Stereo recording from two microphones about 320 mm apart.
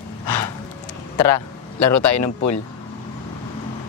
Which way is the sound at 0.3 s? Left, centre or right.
Left.